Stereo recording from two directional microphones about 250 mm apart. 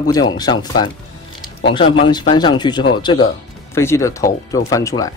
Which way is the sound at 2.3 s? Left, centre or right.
Centre.